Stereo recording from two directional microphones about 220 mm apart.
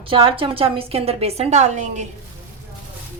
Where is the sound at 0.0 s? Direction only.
25° right (ahead or behind).